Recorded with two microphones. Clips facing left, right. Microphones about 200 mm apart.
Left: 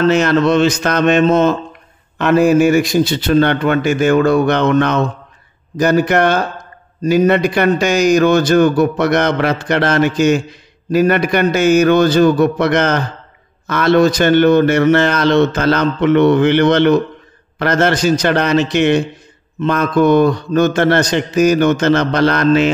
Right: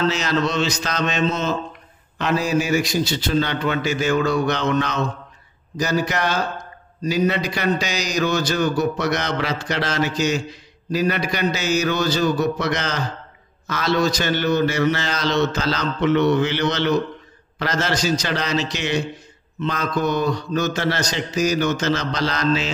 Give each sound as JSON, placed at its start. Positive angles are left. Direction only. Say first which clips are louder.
{"t": 0.0, "sound": "a man's voice", "louder": "left 9 dB", "side_deg": 55}